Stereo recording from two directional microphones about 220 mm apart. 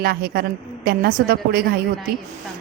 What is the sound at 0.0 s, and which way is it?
A woman's voice, 45° right (ahead or behind).